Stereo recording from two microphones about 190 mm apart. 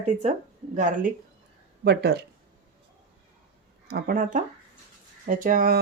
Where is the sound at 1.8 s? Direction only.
60° right (ahead or behind).